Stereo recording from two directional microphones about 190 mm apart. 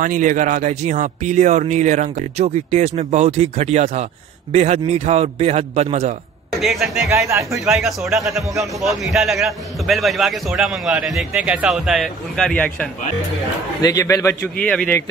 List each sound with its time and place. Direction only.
0.0 s speech: 45° right (ahead or behind)
6.6 s a man's voice: centre (ahead or behind)
7.2 s speech: 15° right (ahead or behind)
7.6 s a man's voice: centre (ahead or behind)
13.7 s a man's voice: 20° left (ahead or behind)